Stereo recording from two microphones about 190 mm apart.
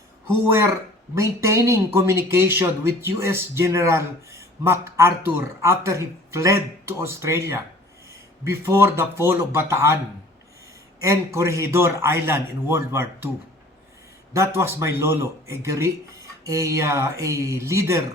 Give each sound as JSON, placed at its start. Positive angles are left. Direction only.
{"t": 0.4, "sound": "speech", "side_deg": -15}
{"t": 11.0, "sound": "speech", "side_deg": -15}
{"t": 14.3, "sound": "speech", "side_deg": -15}